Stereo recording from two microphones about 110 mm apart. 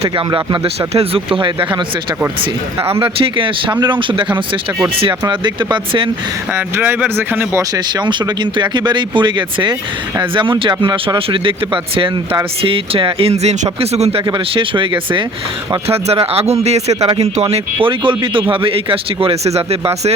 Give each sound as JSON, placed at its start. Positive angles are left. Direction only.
{"t": 0.3, "sound": "speech", "side_deg": -50}
{"t": 3.0, "sound": "speech", "side_deg": -50}
{"t": 5.3, "sound": "speech", "side_deg": -45}
{"t": 6.5, "sound": "speech", "side_deg": -20}
{"t": 7.9, "sound": "speech", "side_deg": -40}
{"t": 14.3, "sound": "speech", "side_deg": -50}
{"t": 15.9, "sound": "speech", "side_deg": -65}